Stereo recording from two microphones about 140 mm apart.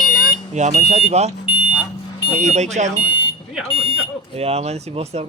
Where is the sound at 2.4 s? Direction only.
55° right (ahead or behind).